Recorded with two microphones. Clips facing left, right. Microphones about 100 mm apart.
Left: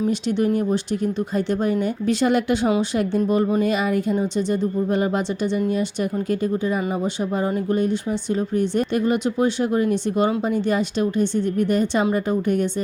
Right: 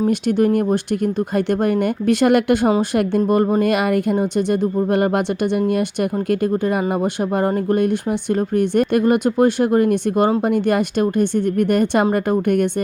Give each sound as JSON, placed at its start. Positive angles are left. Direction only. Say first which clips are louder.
{"t": 0.1, "sound": "speech", "louder": "right 4 dB", "side_deg": -50}
{"t": 3.7, "sound": "speech", "louder": "right 4 dB", "side_deg": -65}
{"t": 10.4, "sound": "speech", "louder": "right 4 dB", "side_deg": -55}